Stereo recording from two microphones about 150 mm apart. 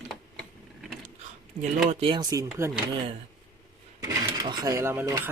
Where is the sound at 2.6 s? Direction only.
15° right (ahead or behind).